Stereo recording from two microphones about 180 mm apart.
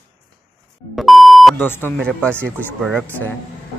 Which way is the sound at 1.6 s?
10° left (ahead or behind).